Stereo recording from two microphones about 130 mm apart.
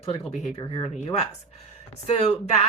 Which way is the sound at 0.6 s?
40° left (ahead or behind).